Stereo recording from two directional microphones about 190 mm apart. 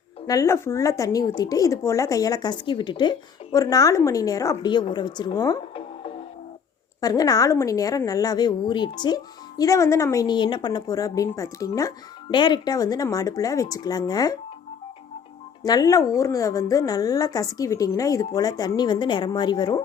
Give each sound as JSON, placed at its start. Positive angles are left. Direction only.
{"t": 0.3, "sound": "a woman's voice", "side_deg": 15}
{"t": 15.6, "sound": "a woman's voice", "side_deg": 20}